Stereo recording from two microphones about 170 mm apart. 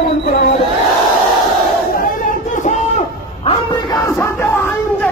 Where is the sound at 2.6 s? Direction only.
40° left (ahead or behind).